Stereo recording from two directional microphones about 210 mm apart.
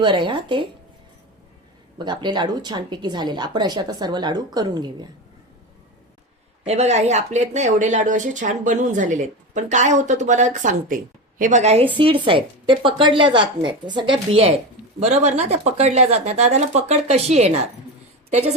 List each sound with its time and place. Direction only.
0.0 s a woman's voice: 25° right (ahead or behind)
2.0 s a woman's voice: 20° right (ahead or behind)
6.7 s a woman's voice: 30° right (ahead or behind)